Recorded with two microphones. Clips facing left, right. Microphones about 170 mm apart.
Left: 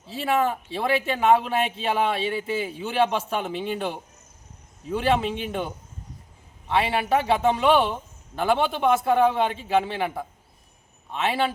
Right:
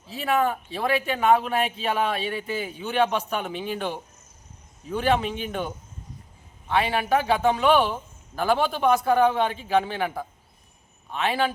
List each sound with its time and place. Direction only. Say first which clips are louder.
0.0 s speech: even; 30° left (ahead or behind)
5.2 s speech: left 1 dB; 25° left (ahead or behind)
6.7 s speech: even; 25° left (ahead or behind)
11.1 s speech: even; 25° left (ahead or behind)